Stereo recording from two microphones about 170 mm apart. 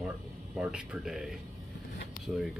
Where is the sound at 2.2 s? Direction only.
55° left (ahead or behind).